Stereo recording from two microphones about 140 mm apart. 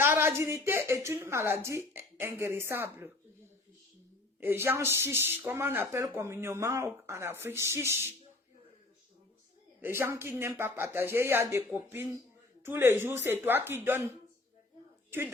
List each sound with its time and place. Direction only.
0.0 s speech: 15° right (ahead or behind)
4.4 s speech: 15° right (ahead or behind)
9.8 s speech: 20° right (ahead or behind)
15.1 s speech: 15° right (ahead or behind)